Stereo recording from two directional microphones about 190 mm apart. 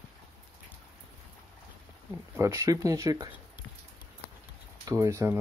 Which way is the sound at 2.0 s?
15° right (ahead or behind).